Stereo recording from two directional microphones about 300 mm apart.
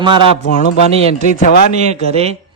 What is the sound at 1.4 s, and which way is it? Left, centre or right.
Speech, left.